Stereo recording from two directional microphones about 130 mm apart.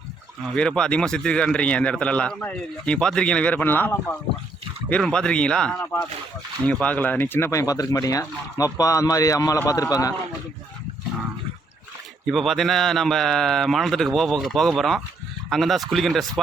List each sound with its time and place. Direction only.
0.5 s a man's voice: 5° left (ahead or behind); by 10.2 s 25° left (ahead or behind)
12.2 s a man's voice: centre (ahead or behind)